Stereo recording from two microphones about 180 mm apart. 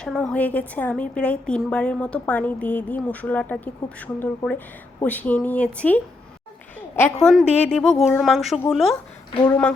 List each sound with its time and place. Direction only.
0.0 s a woman's voice: 5° left (ahead or behind)
6.7 s a sound: 10° left (ahead or behind)
7.3 s a woman's voice: centre (ahead or behind)
9.3 s speech: 20° left (ahead or behind)